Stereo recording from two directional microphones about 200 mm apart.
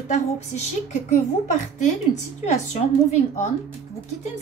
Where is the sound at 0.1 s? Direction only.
35° left (ahead or behind).